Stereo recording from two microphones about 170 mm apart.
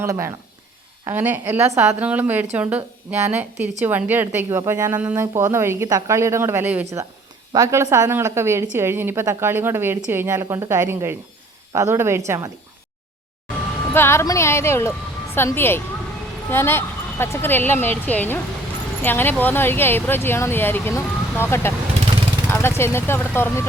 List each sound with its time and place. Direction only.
0.0 s a woman's voice: 15° right (ahead or behind)
13.9 s speech: 15° left (ahead or behind)